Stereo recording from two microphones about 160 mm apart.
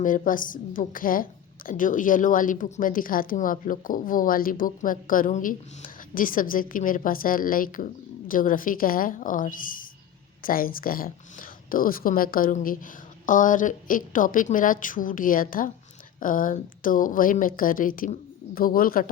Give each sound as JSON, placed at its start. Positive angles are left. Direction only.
{"t": 0.0, "sound": "a woman's voice", "side_deg": 55}